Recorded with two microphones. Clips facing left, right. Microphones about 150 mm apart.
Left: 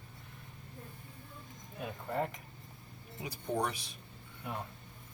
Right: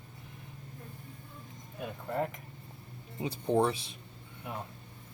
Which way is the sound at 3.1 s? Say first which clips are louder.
Right 7 dB; 25° right (ahead or behind).